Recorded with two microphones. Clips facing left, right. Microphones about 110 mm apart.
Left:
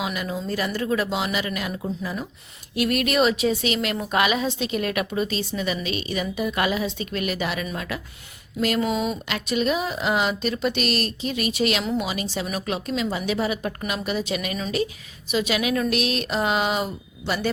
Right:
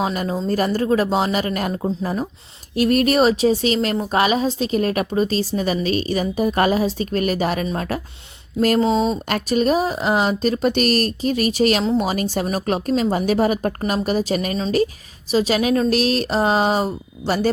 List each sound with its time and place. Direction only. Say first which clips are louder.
0.0 s a woman's voice: right 6 dB; 40° right (ahead or behind)